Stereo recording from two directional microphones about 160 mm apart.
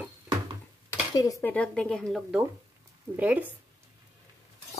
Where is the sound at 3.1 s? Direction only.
10° right (ahead or behind).